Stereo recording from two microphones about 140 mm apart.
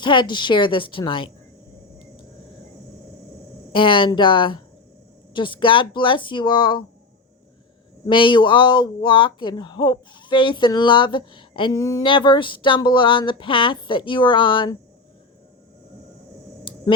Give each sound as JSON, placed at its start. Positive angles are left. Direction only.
{"t": 0.0, "sound": "speech", "side_deg": 35}
{"t": 3.7, "sound": "speech", "side_deg": 35}
{"t": 8.0, "sound": "speech", "side_deg": 35}
{"t": 11.8, "sound": "speech", "side_deg": 25}
{"t": 12.0, "sound": "speech", "side_deg": 35}
{"t": 16.7, "sound": "a sound", "side_deg": 35}